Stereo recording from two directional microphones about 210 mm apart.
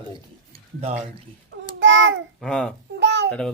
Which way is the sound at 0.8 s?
30° right (ahead or behind).